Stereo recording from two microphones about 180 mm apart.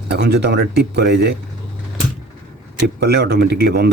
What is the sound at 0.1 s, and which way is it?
Speech, 65° right (ahead or behind).